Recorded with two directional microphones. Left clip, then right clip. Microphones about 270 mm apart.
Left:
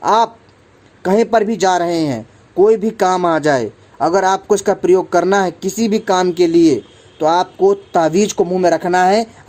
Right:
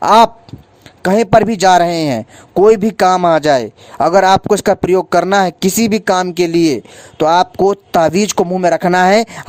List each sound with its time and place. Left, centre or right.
0.0 s a man's voice: right